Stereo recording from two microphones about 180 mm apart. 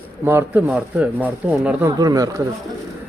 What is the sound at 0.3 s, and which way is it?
Speech, 10° right (ahead or behind).